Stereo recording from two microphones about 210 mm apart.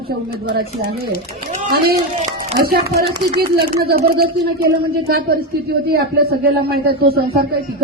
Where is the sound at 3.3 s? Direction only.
45° right (ahead or behind).